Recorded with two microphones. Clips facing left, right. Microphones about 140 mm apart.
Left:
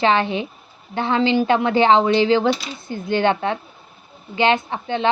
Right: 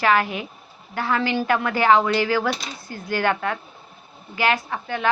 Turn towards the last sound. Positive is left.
turn(degrees=25)  # may be behind; listen again after turning